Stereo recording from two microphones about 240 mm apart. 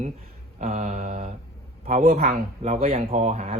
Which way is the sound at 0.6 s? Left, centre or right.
Right.